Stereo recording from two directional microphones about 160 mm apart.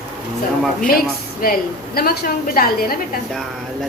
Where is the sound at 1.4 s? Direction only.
65° left (ahead or behind).